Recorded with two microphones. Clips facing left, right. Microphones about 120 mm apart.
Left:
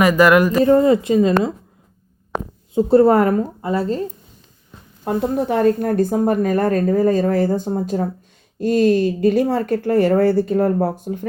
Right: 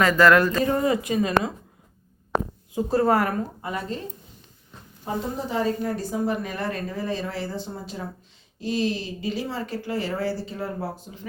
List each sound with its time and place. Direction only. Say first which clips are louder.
0.0 s speech: left 4 dB; 15° left (ahead or behind)
0.6 s speech: left 9 dB; 30° left (ahead or behind)
2.7 s a woman's voice: left 8 dB; 30° left (ahead or behind)
5.0 s speech: left 9 dB; 60° left (ahead or behind)